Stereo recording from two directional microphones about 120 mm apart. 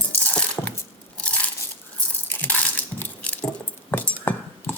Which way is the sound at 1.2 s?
10° left (ahead or behind).